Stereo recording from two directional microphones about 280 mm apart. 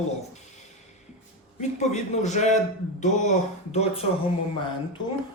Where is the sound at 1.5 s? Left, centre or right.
Left.